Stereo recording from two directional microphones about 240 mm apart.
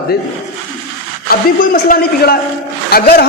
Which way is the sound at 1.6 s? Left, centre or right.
Left.